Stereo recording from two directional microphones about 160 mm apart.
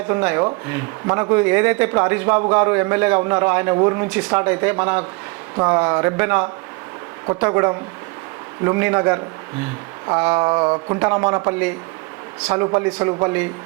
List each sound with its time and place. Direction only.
0.1 s a man's voice: 15° right (ahead or behind)
10.1 s a sound: 15° right (ahead or behind)
11.0 s a man's voice: 15° right (ahead or behind)